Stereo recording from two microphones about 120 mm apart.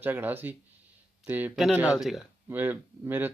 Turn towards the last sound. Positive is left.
turn(degrees=-15)  # may be behind; listen again after turning